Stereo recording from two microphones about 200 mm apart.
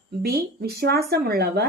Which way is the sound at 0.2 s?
50° right (ahead or behind).